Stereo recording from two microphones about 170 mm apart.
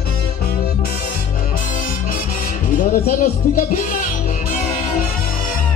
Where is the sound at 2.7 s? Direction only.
55° left (ahead or behind).